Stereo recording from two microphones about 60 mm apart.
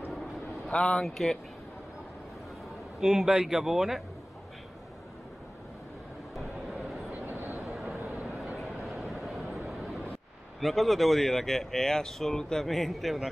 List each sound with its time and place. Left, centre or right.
0.7 s a man's voice: centre
3.0 s speech: centre
7.1 s a sound: right
8.5 s vehicle: centre
10.6 s speech: centre